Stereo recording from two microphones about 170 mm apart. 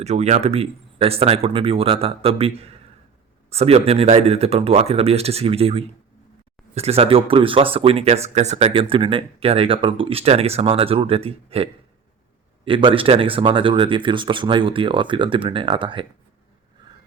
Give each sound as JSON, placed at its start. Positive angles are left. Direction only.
{"t": 0.0, "sound": "speech", "side_deg": -40}